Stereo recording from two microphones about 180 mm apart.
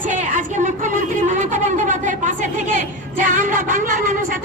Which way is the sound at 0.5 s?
45° right (ahead or behind).